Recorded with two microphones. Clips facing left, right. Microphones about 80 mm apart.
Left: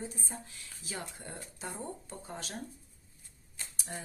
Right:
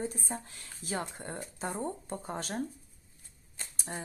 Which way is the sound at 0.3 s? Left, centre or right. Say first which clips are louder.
Right 5 dB; right.